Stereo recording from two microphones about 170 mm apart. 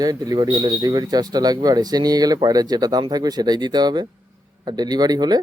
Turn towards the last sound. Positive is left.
turn(degrees=-25)  # may be behind; listen again after turning